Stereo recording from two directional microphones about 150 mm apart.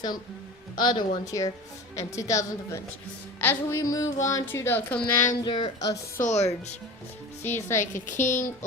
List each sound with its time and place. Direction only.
0.8 s speech: 30° left (ahead or behind); by 5.0 s 10° left (ahead or behind)
5.4 s speech: 30° left (ahead or behind)
6.2 s speech: 50° left (ahead or behind)
7.4 s speech: 15° left (ahead or behind)
7.9 s speech: 60° left (ahead or behind)